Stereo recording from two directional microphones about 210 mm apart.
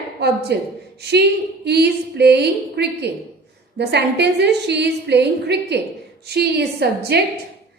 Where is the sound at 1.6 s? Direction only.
50° right (ahead or behind).